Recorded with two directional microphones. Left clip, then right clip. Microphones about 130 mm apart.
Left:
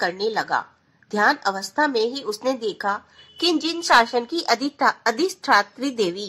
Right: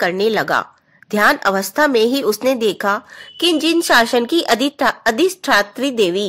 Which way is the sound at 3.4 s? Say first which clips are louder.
Right 6 dB; 40° right (ahead or behind).